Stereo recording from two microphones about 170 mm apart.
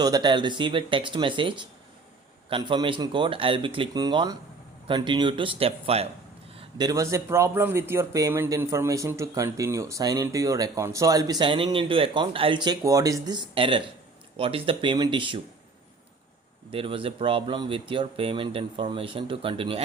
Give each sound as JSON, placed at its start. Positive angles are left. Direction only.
{"t": 0.0, "sound": "speech", "side_deg": -25}
{"t": 16.7, "sound": "speech", "side_deg": -30}